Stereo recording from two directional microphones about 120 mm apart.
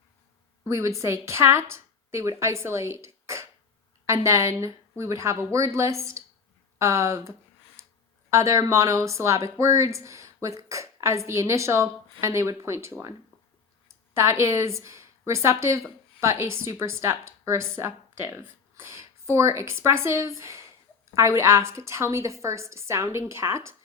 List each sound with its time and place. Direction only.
0.6 s a woman's voice: 25° right (ahead or behind)
14.2 s a woman's voice: 20° right (ahead or behind)